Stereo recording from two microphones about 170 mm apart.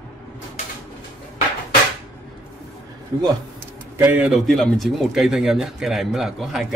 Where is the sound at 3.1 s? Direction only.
25° right (ahead or behind).